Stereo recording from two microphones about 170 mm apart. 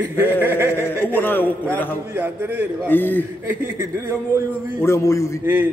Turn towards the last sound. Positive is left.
turn(degrees=-10)  # may be behind; listen again after turning